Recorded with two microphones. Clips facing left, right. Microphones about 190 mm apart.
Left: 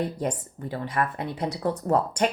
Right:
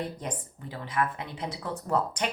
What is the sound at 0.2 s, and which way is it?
Speech, 50° left (ahead or behind).